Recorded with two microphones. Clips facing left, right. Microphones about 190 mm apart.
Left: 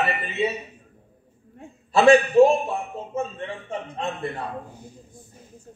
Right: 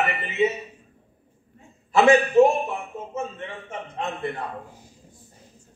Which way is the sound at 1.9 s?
30° left (ahead or behind).